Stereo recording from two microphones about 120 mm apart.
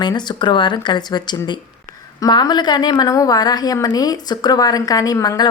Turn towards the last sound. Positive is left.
turn(degrees=30)  # may be behind; listen again after turning